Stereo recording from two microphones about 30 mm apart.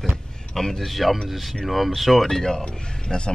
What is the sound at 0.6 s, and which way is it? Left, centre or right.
Speech, centre.